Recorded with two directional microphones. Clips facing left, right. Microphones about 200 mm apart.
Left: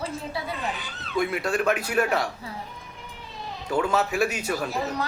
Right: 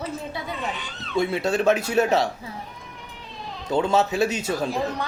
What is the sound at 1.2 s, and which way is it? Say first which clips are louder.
Speech: right 3 dB; 25° right (ahead or behind).